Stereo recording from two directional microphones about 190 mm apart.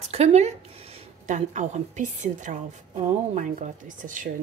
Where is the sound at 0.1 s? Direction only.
35° right (ahead or behind).